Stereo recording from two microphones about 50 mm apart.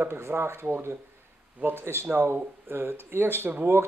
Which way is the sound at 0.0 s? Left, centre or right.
Right.